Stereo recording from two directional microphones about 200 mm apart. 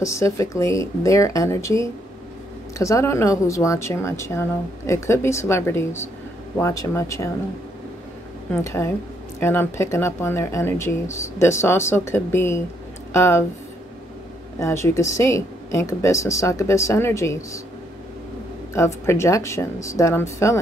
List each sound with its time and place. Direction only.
0.0 s speech: 15° left (ahead or behind)
8.5 s speech: 15° left (ahead or behind)
14.6 s speech: 15° left (ahead or behind)
18.7 s speech: 15° left (ahead or behind)